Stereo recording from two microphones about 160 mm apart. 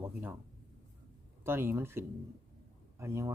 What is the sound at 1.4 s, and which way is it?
Speech, 15° right (ahead or behind).